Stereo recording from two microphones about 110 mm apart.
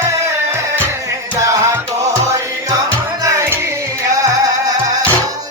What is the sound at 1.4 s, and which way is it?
Music, 30° right (ahead or behind).